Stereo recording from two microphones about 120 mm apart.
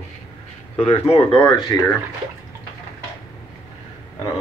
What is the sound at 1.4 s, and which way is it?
Speech, 35° left (ahead or behind).